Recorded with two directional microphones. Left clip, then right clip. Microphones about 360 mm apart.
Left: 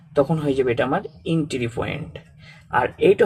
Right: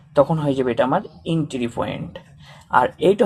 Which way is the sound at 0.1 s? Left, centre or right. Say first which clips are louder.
Right 3 dB; centre.